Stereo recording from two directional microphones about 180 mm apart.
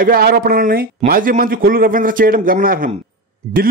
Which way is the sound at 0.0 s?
55° right (ahead or behind).